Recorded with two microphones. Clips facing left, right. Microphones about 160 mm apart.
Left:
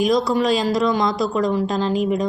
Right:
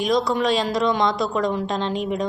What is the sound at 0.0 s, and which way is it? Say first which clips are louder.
Speech: left 2 dB; 5° left (ahead or behind).